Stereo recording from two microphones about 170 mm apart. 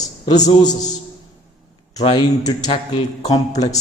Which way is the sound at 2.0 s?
30° left (ahead or behind).